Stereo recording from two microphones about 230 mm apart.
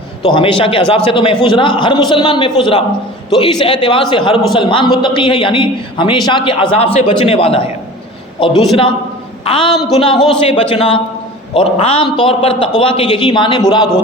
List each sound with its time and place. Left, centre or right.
0.6 s a man's voice: left